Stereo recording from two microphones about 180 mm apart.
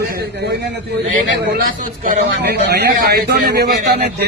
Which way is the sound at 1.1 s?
50° right (ahead or behind).